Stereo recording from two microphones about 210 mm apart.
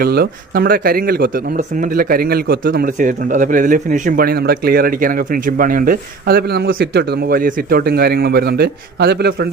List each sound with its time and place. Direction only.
0.0 s speech: 45° right (ahead or behind)